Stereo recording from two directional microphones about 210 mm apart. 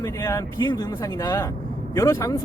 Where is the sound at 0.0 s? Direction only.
15° left (ahead or behind).